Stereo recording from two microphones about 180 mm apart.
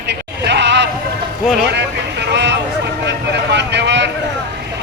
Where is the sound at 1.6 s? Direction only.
70° right (ahead or behind).